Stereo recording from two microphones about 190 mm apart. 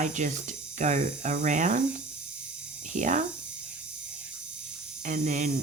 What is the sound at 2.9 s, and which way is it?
Speech, 40° right (ahead or behind).